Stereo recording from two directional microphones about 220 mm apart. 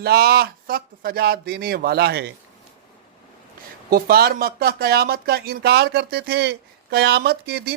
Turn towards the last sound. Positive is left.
turn(degrees=-45)  # may be behind; listen again after turning